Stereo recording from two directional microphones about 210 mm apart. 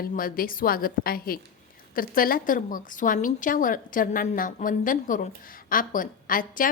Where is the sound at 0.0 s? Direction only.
45° left (ahead or behind).